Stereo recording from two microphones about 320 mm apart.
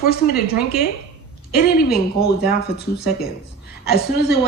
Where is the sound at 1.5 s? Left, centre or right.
Left.